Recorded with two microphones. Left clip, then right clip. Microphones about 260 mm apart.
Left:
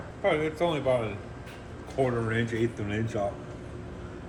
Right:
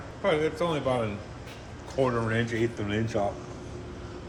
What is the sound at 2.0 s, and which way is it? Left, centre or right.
Speech, right.